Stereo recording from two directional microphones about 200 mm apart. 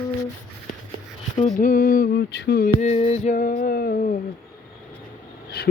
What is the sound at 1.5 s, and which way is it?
Music, 45° left (ahead or behind).